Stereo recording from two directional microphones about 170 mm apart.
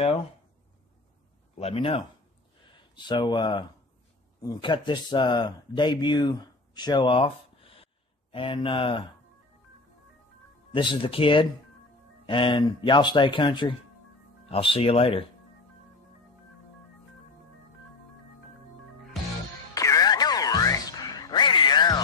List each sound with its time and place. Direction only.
1.6 s speech: 35° left (ahead or behind)
3.1 s a man's voice: 25° left (ahead or behind)
10.7 s a man's voice: 30° left (ahead or behind)
19.7 s music: 20° left (ahead or behind)